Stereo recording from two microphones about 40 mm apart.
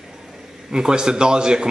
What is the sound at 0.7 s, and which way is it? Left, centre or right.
Speech, centre.